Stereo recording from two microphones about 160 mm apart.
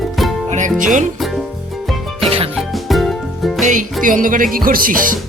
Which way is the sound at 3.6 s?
55° right (ahead or behind).